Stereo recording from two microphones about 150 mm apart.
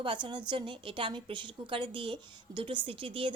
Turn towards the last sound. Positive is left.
turn(degrees=-35)  # may be behind; listen again after turning